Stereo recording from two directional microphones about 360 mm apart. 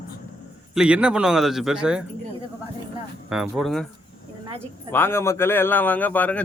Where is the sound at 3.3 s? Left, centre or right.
Centre.